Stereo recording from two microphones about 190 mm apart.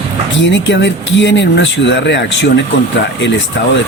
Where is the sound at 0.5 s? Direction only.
70° left (ahead or behind).